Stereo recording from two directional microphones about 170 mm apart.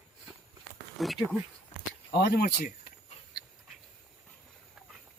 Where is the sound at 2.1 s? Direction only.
70° left (ahead or behind).